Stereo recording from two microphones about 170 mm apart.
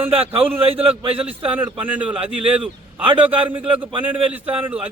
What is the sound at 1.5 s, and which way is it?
Speech, 10° right (ahead or behind).